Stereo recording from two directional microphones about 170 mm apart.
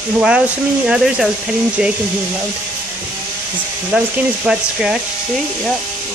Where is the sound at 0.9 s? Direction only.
5° right (ahead or behind).